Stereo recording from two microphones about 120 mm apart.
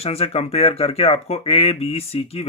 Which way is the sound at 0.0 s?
55° left (ahead or behind).